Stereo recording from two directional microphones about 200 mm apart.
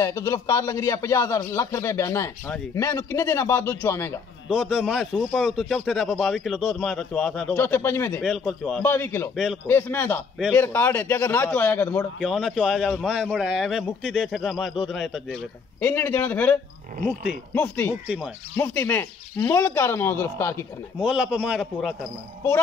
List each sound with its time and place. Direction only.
0.0 s speech: 15° left (ahead or behind)
4.5 s a man's voice: centre (ahead or behind)
15.8 s speech: 10° left (ahead or behind)
17.6 s speech: 10° left (ahead or behind)
18.0 s a man's voice: 5° right (ahead or behind)
18.6 s speech: 10° left (ahead or behind)
21.0 s a man's voice: 5° right (ahead or behind)